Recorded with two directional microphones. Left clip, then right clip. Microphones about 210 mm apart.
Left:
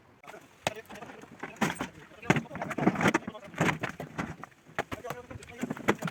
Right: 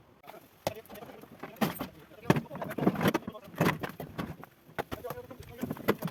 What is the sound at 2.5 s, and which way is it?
Vehicle, 25° right (ahead or behind).